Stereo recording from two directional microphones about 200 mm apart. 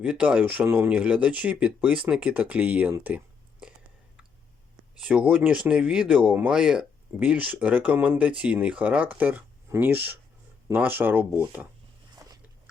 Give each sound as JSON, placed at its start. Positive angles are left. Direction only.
{"t": 0.0, "sound": "speech", "side_deg": -5}
{"t": 4.9, "sound": "speech", "side_deg": -5}
{"t": 12.1, "sound": "biting", "side_deg": -20}